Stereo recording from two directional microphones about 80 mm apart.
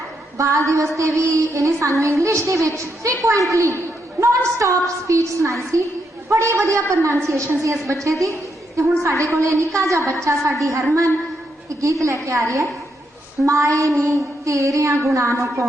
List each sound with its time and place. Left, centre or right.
0.3 s a woman's voice: right